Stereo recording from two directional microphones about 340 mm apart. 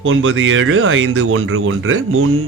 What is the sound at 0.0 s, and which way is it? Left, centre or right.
Speech, right.